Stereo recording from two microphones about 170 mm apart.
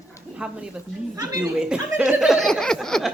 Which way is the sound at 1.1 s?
25° right (ahead or behind).